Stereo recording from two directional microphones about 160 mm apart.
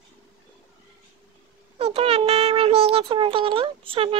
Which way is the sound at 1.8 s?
40° right (ahead or behind).